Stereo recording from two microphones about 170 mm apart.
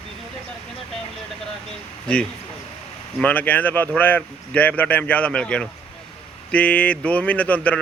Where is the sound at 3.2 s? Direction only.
10° left (ahead or behind).